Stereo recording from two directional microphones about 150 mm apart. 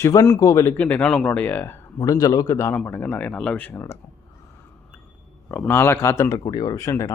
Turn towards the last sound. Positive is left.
turn(degrees=20)  # may be behind; listen again after turning